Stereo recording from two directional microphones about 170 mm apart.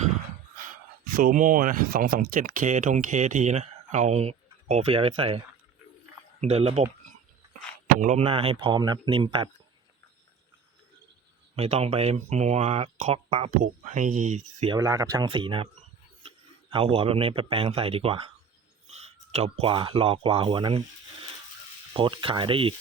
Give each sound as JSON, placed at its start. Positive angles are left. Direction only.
{"t": 1.0, "sound": "speech", "side_deg": -55}
{"t": 6.4, "sound": "speech", "side_deg": -35}
{"t": 7.9, "sound": "speech", "side_deg": -45}
{"t": 11.5, "sound": "speech", "side_deg": -35}
{"t": 14.7, "sound": "speech", "side_deg": -20}
{"t": 15.3, "sound": "speech", "side_deg": -30}
{"t": 16.7, "sound": "speech", "side_deg": -35}
{"t": 21.9, "sound": "speech", "side_deg": -30}